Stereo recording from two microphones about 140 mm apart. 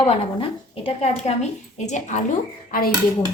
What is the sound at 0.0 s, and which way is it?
A woman's voice, 40° left (ahead or behind).